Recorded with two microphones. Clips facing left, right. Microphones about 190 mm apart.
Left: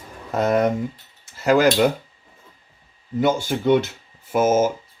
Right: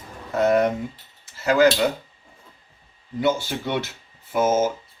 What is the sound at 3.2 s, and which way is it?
Speech, 50° left (ahead or behind).